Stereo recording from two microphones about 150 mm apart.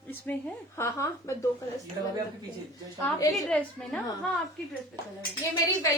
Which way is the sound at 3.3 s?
10° left (ahead or behind).